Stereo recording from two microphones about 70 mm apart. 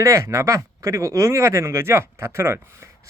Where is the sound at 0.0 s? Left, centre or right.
Right.